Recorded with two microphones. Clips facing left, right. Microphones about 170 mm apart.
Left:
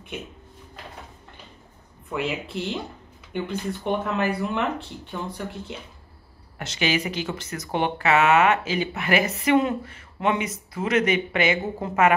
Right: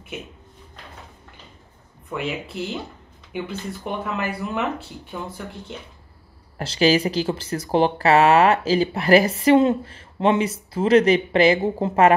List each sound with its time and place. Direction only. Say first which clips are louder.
2.0 s speech: even; centre (ahead or behind)
6.6 s speech: right 7 dB; 35° right (ahead or behind)